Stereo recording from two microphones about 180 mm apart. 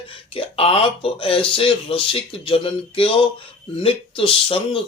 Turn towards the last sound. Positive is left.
turn(degrees=30)  # may be behind; listen again after turning